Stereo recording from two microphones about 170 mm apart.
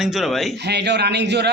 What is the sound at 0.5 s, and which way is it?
Speech, 85° right.